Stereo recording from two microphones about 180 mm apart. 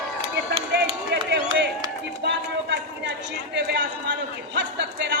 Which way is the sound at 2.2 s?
75° right (ahead or behind).